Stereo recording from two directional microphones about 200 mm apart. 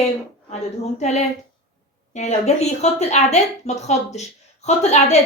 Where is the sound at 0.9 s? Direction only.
35° left (ahead or behind).